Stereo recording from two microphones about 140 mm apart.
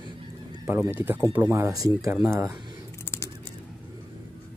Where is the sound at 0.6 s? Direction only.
15° right (ahead or behind).